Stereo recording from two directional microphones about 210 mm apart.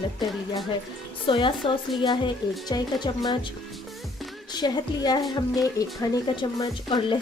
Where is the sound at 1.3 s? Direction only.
25° left (ahead or behind).